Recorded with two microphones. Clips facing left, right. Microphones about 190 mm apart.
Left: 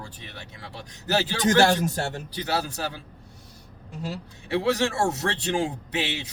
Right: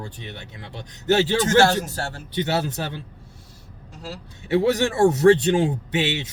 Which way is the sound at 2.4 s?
25° right (ahead or behind).